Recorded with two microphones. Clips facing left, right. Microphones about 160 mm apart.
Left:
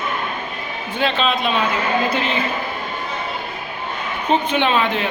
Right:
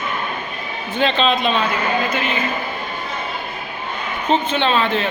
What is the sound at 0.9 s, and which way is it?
Speech, 5° left (ahead or behind).